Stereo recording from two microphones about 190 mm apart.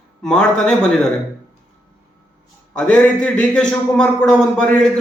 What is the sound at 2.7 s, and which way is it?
A man's voice, 5° left (ahead or behind).